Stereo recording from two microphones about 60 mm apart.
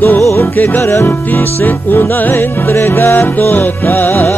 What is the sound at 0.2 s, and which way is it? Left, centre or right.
Music, left.